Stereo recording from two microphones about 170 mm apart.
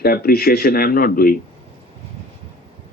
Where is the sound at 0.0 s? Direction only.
60° left (ahead or behind).